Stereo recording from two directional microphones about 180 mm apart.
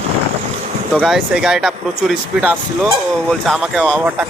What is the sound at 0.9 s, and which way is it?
Speech, centre (ahead or behind).